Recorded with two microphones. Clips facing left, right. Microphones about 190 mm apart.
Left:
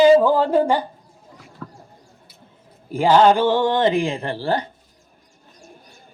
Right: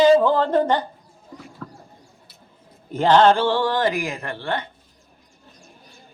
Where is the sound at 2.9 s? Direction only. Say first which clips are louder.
Left 1 dB; 10° left (ahead or behind); by 4.7 s 35° left (ahead or behind).